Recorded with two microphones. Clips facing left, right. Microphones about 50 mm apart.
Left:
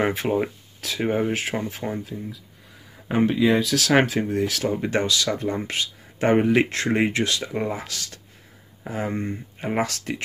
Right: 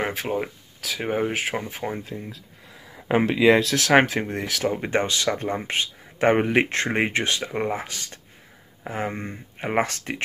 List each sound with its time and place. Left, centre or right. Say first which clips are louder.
0.0 s speech: left 4 dB; centre
1.1 s speech: right 2 dB; centre
2.0 s speech: left 1 dB; right
3.1 s speech: right 2 dB; right
3.7 s speech: right 1 dB; right
9.6 s speech: right 2 dB; right